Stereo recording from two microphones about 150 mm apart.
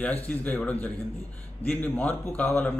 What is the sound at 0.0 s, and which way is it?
A man's voice, 10° left (ahead or behind).